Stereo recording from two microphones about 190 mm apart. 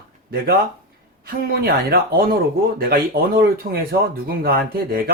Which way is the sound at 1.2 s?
55° right (ahead or behind).